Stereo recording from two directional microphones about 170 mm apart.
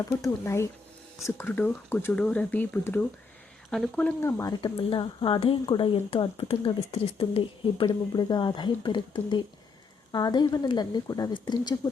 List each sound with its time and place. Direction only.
0.0 s speech: 20° left (ahead or behind)